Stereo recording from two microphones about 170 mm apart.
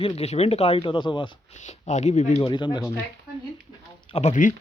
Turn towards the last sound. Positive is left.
turn(degrees=45)  # may be behind; listen again after turning